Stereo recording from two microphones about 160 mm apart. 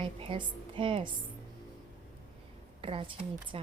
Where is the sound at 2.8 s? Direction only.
35° right (ahead or behind).